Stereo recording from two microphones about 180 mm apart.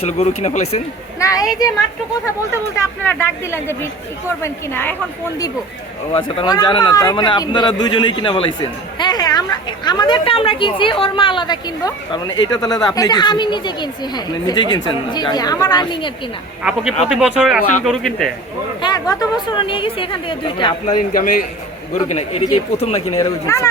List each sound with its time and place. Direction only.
0.0 s speech: 35° left (ahead or behind)
1.2 s speech: 20° left (ahead or behind)
2.7 s speech: 15° left (ahead or behind)
6.1 s speech: 30° left (ahead or behind)
16.6 s speech: 5° right (ahead or behind)
18.8 s speech: 20° left (ahead or behind)
20.8 s a man's voice: 50° left (ahead or behind)
21.9 s speech: 35° left (ahead or behind)
23.2 s speech: 15° left (ahead or behind)